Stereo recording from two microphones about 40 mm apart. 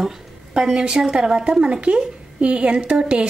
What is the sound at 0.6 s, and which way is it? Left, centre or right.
Speech, right.